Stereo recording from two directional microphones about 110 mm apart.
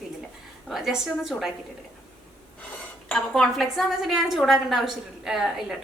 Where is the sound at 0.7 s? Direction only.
5° right (ahead or behind).